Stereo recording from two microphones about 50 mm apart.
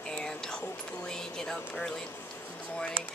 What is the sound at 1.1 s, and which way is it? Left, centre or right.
Speech, centre.